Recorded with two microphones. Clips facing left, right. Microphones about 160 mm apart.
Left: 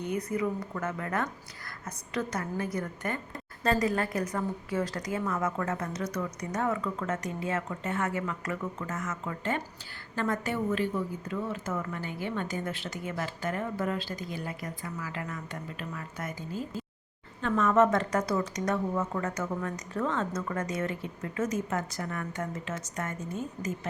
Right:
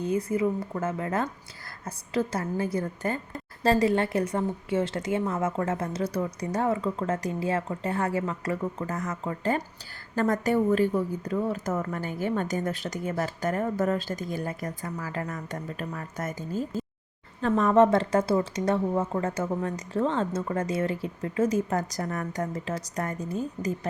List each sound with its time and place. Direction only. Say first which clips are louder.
0.0 s a woman's voice: right 5 dB; 30° right (ahead or behind)